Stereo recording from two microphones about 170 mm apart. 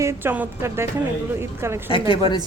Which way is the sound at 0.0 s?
15° right (ahead or behind).